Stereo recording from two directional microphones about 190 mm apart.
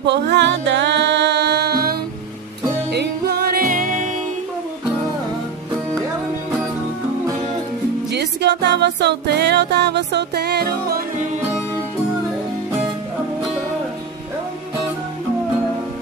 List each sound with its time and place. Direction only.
0.0 s music: 65° right (ahead or behind); by 4.1 s 45° right (ahead or behind)
8.1 s music: 65° right (ahead or behind)